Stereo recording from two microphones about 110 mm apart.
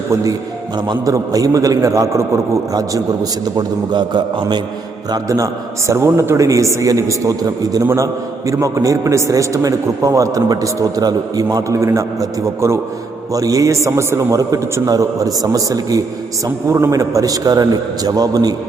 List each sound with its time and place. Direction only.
0.9 s a man's voice: 30° right (ahead or behind)
5.1 s a man's voice: 30° right (ahead or behind)